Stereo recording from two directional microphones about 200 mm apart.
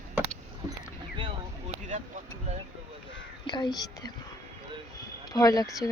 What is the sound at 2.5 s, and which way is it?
Speech, 35° right (ahead or behind).